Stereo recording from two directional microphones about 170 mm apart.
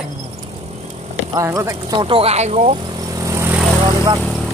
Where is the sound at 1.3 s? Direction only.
20° right (ahead or behind); by 2.7 s 40° right (ahead or behind).